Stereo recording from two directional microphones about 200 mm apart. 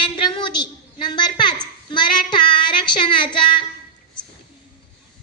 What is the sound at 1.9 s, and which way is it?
Child singing, 25° left (ahead or behind).